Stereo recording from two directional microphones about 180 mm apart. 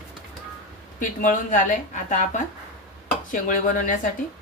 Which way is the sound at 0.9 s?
45° left (ahead or behind).